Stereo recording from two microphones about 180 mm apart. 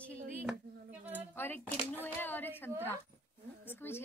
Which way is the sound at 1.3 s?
10° left (ahead or behind).